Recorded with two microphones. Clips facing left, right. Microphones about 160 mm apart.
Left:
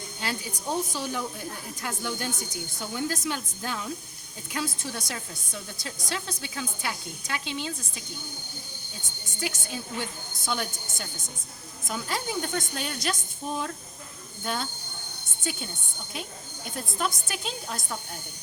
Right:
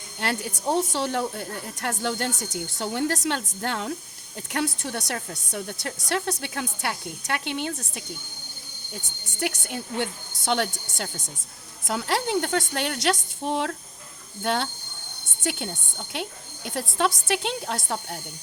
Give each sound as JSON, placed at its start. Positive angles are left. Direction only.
{"t": 0.2, "sound": "a woman's voice", "side_deg": -70}
{"t": 9.4, "sound": "a woman's voice", "side_deg": -65}